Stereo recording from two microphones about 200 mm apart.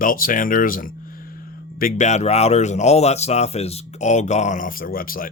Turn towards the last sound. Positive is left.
turn(degrees=45)  # may be behind; listen again after turning